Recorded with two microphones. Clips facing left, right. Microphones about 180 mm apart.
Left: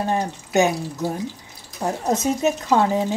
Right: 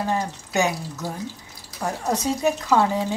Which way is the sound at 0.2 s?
20° left (ahead or behind).